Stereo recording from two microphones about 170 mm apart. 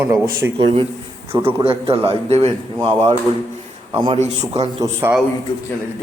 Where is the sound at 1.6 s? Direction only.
35° right (ahead or behind).